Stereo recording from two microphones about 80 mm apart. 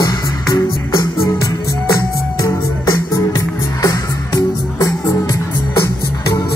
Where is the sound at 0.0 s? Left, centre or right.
Left.